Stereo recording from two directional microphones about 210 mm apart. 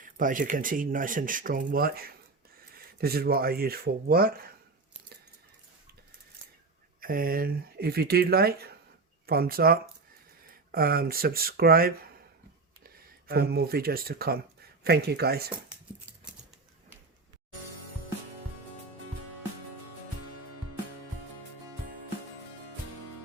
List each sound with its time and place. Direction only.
0.0 s speech: 40° right (ahead or behind)
7.0 s speech: 45° right (ahead or behind)